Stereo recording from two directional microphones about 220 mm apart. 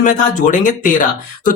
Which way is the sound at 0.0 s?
35° left (ahead or behind).